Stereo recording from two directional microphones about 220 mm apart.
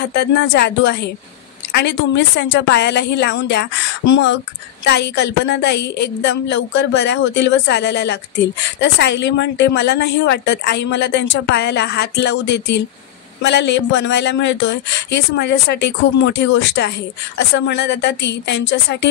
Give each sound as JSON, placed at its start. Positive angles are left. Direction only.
{"t": 0.0, "sound": "a woman's voice", "side_deg": 50}